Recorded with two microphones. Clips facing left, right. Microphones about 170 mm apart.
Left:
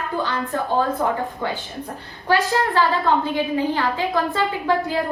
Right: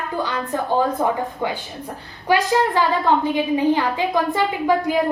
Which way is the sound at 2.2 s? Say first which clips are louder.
Right 2 dB; 15° right (ahead or behind).